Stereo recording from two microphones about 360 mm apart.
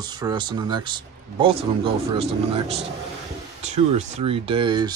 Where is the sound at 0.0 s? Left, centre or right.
Centre.